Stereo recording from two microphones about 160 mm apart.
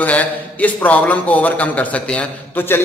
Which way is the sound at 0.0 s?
10° left (ahead or behind).